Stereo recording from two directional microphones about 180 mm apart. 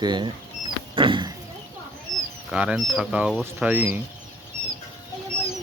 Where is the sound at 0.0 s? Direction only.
25° right (ahead or behind).